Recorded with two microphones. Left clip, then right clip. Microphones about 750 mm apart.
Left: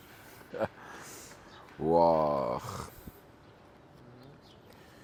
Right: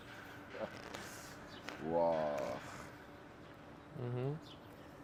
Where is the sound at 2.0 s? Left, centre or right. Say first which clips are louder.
Left 9 dB; left.